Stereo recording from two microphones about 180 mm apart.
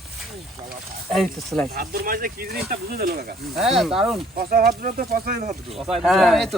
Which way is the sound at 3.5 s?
Centre (ahead or behind).